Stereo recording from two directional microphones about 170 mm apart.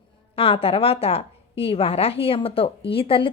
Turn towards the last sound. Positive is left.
turn(degrees=30)  # may be behind; listen again after turning